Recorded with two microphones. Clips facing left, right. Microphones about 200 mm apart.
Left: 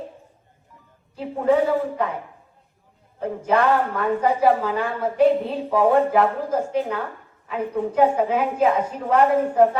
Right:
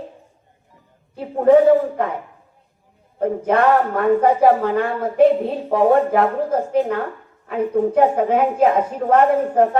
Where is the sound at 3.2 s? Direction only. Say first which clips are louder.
Right 4 dB; 55° right (ahead or behind).